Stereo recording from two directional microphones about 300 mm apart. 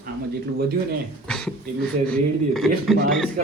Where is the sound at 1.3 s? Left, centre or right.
Centre.